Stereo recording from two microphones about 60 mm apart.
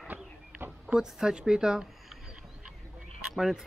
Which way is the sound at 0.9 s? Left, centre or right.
Centre.